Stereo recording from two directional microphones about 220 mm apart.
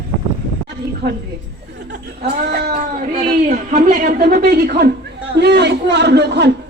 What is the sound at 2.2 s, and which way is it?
A woman's voice, 45° right (ahead or behind).